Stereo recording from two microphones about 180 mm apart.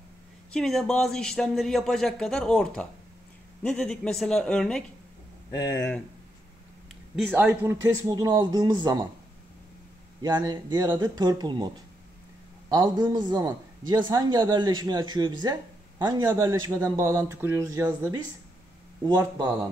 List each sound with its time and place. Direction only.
0.5 s speech: 5° left (ahead or behind)
5.5 s speech: 20° left (ahead or behind)
7.3 s a man's voice: 10° right (ahead or behind)
10.2 s a man's voice: 20° right (ahead or behind)
19.0 s a man's voice: 25° right (ahead or behind)